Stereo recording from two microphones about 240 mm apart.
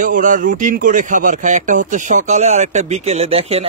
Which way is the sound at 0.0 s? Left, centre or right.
Right.